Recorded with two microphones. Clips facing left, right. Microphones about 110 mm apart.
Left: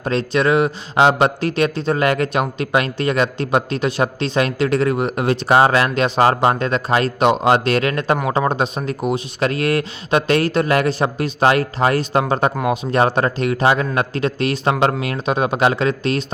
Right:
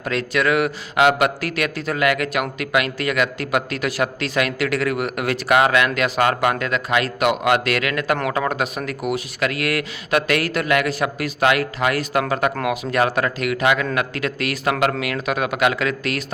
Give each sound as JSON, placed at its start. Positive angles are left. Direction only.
{"t": 0.0, "sound": "a man's voice", "side_deg": 25}